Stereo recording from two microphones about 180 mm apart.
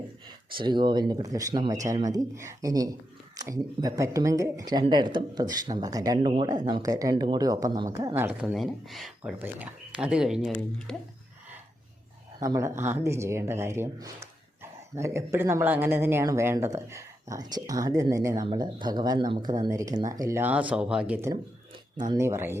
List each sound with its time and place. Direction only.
0.5 s speech: 25° right (ahead or behind); by 8.5 s 10° right (ahead or behind)
8.5 s speech: centre (ahead or behind)
12.4 s speech: 20° right (ahead or behind)